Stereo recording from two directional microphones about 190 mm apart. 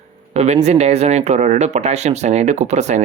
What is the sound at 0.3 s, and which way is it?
Speech, 35° right (ahead or behind).